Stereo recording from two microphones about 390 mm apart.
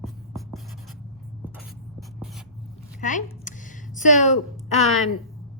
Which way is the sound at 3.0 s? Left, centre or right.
Centre.